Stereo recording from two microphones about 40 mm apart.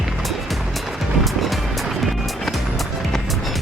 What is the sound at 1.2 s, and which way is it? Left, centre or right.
Music, centre.